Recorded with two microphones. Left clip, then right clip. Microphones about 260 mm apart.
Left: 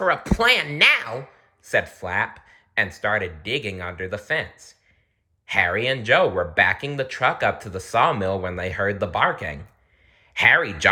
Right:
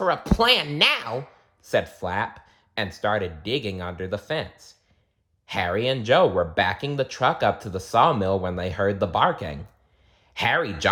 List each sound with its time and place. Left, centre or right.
0.0 s speech: centre
5.5 s speech: centre